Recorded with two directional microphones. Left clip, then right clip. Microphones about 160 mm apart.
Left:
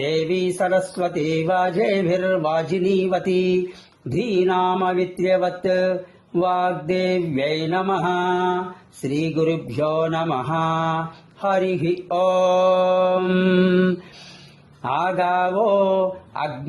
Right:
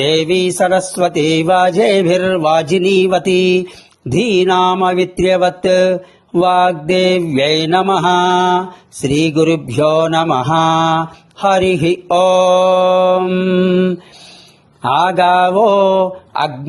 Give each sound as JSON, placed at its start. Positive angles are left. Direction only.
{"t": 0.0, "sound": "mantra", "side_deg": -35}
{"t": 13.2, "sound": "mantra", "side_deg": -10}
{"t": 14.8, "sound": "mantra", "side_deg": -35}